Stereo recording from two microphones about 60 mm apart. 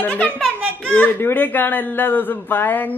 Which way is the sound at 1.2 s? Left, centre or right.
Left.